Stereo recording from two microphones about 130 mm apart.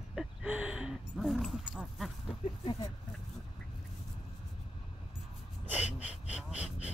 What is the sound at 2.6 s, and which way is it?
Speech, 40° left (ahead or behind).